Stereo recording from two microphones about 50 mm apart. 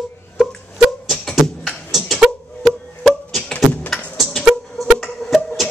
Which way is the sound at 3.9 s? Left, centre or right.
Centre.